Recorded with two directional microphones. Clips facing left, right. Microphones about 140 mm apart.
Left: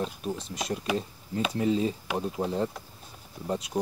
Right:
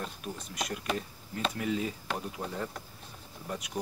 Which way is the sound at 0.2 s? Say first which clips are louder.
Left 7 dB; 25° left (ahead or behind).